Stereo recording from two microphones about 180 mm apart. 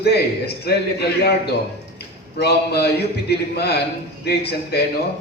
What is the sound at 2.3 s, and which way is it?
A man's voice, 65° left (ahead or behind).